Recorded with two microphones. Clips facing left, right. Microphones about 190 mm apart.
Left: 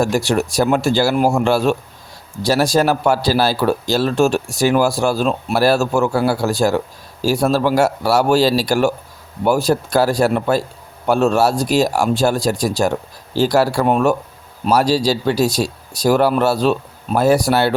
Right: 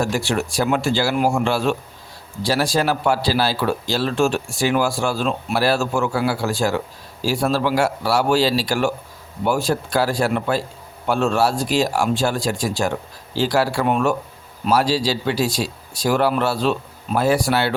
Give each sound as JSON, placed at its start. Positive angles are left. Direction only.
{"t": 0.0, "sound": "a man's voice", "side_deg": 40}